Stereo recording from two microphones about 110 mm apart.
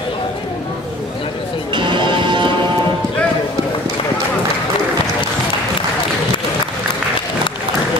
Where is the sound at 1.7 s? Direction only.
45° right (ahead or behind).